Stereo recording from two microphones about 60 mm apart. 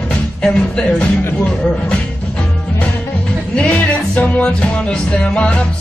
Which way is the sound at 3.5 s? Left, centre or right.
Left.